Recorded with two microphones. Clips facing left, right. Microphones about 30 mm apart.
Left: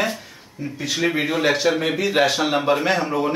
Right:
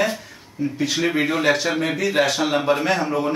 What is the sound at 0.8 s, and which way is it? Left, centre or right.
Speech, centre.